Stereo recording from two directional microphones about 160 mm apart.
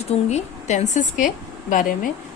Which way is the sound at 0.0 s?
45° left (ahead or behind).